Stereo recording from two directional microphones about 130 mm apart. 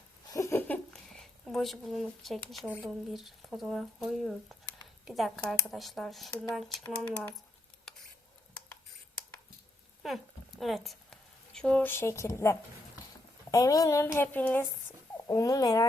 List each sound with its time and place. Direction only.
0.3 s a sound: 25° left (ahead or behind)
0.7 s speech: 5° left (ahead or behind)
6.8 s speech: 10° left (ahead or behind)
10.6 s speech: centre (ahead or behind)
15.3 s speech: 25° left (ahead or behind)